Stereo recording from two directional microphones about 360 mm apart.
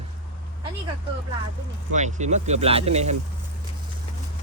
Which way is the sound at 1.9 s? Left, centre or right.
Centre.